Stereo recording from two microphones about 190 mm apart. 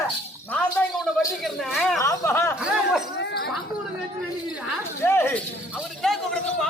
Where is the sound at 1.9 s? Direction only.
15° left (ahead or behind).